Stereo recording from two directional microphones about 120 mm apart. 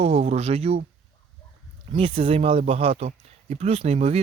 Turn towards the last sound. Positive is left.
turn(degrees=-60)  # may be behind; listen again after turning